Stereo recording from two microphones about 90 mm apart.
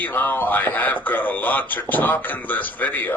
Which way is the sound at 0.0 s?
20° left (ahead or behind).